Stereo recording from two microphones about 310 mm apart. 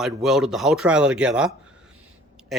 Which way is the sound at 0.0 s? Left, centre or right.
Centre.